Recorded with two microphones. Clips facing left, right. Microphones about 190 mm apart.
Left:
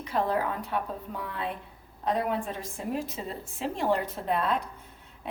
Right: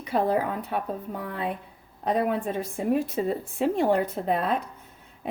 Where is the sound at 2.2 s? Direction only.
55° right (ahead or behind).